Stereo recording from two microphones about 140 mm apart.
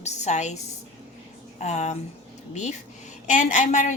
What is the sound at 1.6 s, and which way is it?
Speech, 55° left (ahead or behind).